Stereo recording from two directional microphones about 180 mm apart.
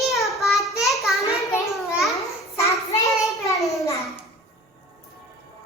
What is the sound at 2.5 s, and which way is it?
Child singing, 35° left (ahead or behind).